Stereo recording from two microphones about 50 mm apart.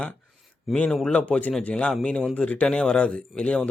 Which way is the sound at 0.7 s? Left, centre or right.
Centre.